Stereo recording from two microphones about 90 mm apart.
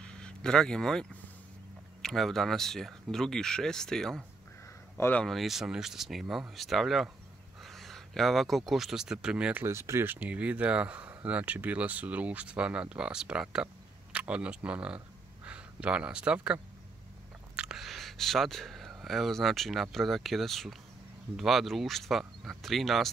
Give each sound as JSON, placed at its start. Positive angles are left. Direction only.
{"t": 0.0, "sound": "a sound", "side_deg": 10}
{"t": 2.0, "sound": "speech", "side_deg": 5}
{"t": 5.0, "sound": "speech", "side_deg": 35}
{"t": 5.3, "sound": "speech", "side_deg": 0}
{"t": 9.6, "sound": "speech", "side_deg": -30}
{"t": 17.6, "sound": "speech", "side_deg": -5}